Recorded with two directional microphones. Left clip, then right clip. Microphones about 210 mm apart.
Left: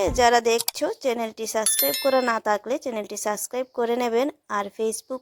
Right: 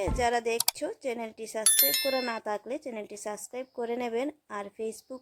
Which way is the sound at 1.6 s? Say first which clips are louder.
Right 1 dB; centre (ahead or behind).